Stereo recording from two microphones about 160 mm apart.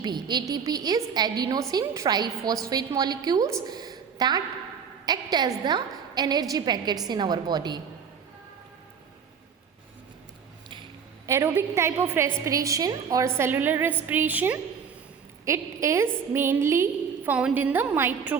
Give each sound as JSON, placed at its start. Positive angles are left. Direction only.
{"t": 0.0, "sound": "a woman's voice", "side_deg": -25}
{"t": 3.7, "sound": "a sound", "side_deg": -25}
{"t": 5.0, "sound": "a woman's voice", "side_deg": -25}
{"t": 11.3, "sound": "a woman's voice", "side_deg": -15}